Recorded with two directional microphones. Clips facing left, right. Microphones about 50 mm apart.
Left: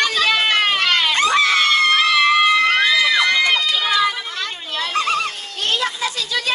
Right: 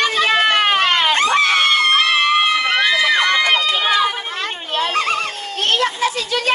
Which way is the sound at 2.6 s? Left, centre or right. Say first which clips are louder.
Even; right.